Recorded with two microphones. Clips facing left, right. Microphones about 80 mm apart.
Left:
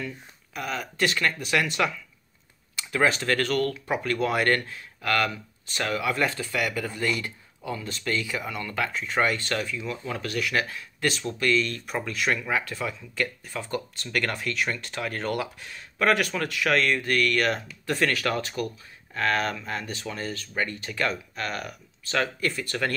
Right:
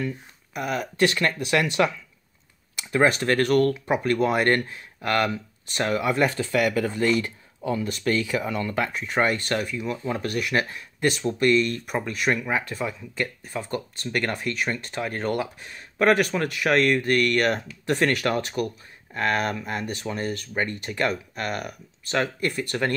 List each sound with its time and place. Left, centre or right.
0.6 s speech: right
2.9 s speech: right
3.5 s speech: right
6.5 s speech: right